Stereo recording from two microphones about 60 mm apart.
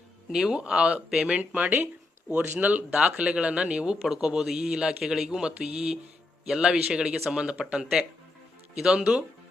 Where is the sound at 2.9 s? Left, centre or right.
Centre.